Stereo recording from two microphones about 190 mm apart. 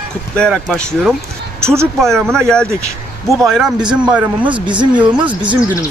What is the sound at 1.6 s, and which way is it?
Speech, 15° right (ahead or behind).